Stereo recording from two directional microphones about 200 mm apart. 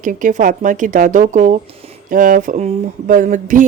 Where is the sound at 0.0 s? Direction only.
40° right (ahead or behind).